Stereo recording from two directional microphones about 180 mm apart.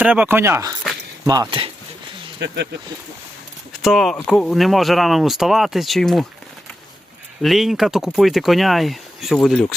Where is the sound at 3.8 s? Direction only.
Centre (ahead or behind).